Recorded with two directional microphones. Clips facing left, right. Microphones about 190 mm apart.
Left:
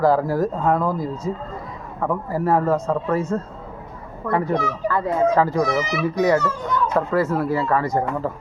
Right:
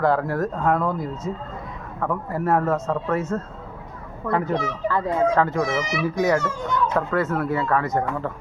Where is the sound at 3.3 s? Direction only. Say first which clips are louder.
Left 2 dB; 5° left (ahead or behind).